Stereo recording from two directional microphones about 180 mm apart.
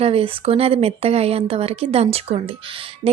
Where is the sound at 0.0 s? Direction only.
35° right (ahead or behind).